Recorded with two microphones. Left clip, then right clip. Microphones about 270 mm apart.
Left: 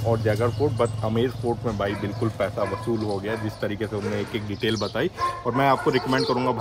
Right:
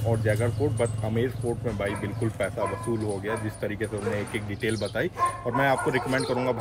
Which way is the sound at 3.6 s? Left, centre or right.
Centre.